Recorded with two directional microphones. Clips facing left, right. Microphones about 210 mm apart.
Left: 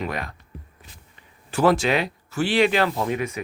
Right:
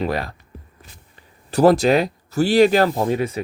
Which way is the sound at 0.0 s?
35° right (ahead or behind).